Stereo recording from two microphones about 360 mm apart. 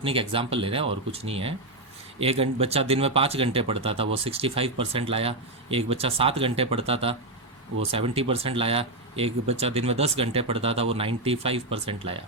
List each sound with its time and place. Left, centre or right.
0.0 s speech: centre